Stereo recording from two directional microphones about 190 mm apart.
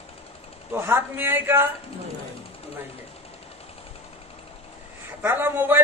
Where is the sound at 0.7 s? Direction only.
10° right (ahead or behind).